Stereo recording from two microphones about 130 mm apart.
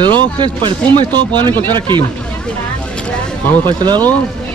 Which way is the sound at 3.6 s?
35° right (ahead or behind).